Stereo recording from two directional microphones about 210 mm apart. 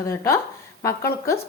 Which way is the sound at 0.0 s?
15° left (ahead or behind).